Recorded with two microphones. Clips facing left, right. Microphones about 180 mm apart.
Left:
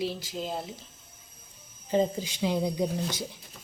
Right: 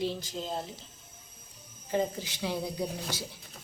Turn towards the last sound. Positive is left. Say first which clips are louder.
# left 5 dB
turn(degrees=20)  # may be behind; listen again after turning